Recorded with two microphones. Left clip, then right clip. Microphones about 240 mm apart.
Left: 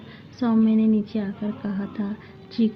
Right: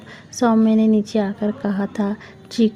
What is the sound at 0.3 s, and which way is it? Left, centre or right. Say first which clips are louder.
A woman's voice: right 6 dB; right.